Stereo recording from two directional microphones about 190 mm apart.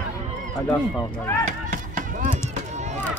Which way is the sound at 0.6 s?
10° left (ahead or behind).